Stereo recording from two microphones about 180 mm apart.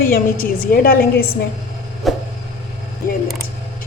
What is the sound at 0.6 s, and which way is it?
Speech, 55° left (ahead or behind).